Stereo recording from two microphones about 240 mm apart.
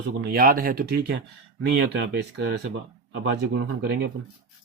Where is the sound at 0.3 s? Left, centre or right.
Right.